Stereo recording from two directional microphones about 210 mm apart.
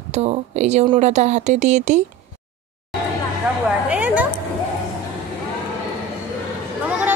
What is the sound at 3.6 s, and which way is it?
Speech, 5° right (ahead or behind).